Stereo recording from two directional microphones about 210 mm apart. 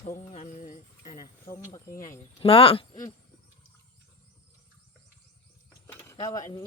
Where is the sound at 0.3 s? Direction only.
35° left (ahead or behind).